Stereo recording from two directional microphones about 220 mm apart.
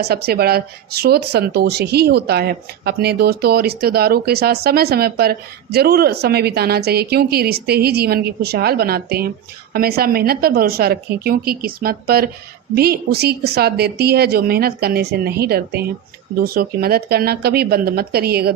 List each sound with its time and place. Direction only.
0.0 s speech: 45° right (ahead or behind)